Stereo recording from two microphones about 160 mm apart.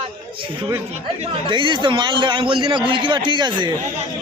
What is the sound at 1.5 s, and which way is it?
A man's voice, 30° right (ahead or behind).